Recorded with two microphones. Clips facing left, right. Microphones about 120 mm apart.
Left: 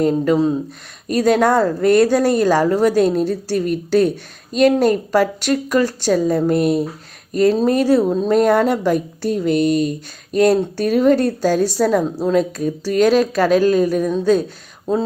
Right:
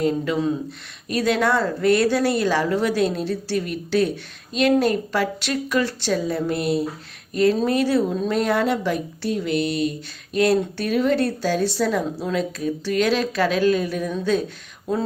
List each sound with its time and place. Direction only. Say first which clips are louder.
0.0 s speech: left 6 dB; 40° left (ahead or behind)